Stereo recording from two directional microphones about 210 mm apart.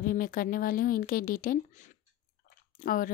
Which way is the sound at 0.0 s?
40° left (ahead or behind).